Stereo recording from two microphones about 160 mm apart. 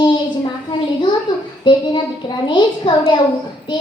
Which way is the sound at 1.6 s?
30° left (ahead or behind).